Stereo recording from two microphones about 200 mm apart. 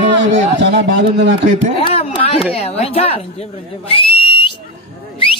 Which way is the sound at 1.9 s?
30° left (ahead or behind).